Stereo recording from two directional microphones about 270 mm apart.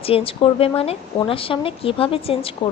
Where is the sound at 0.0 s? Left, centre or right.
Left.